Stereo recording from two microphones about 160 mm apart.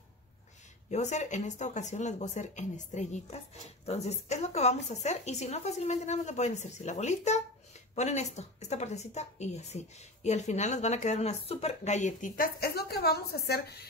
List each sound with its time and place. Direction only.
0.8 s a woman's voice: 45° left (ahead or behind)
12.5 s a woman's voice: 80° left